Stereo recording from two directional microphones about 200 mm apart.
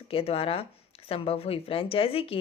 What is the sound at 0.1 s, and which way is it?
Speech, 30° left (ahead or behind).